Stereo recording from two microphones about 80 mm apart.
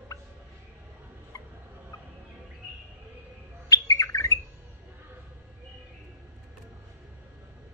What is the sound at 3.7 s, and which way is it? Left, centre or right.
Bird, left.